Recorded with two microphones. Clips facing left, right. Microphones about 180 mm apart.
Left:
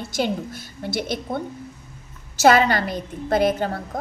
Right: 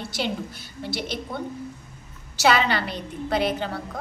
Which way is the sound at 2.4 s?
45° left (ahead or behind).